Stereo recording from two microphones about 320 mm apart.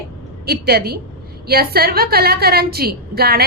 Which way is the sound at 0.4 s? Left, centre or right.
Right.